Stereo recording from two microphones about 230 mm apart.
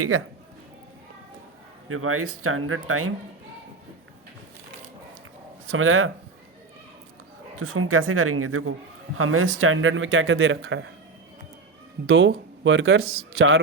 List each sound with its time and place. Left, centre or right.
1.9 s speech: right
5.7 s speech: right
7.5 s speech: right
12.0 s speech: right